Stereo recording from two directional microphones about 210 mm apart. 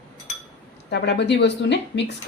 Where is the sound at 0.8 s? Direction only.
55° left (ahead or behind).